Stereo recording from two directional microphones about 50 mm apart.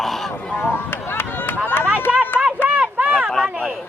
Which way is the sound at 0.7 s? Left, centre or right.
Left.